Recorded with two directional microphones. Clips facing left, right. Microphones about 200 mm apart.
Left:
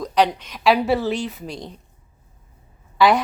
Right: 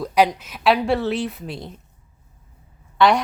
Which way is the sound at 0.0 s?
10° right (ahead or behind).